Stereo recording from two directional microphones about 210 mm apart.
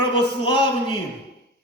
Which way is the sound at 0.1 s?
25° left (ahead or behind).